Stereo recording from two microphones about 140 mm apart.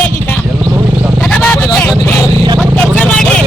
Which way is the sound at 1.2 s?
5° left (ahead or behind).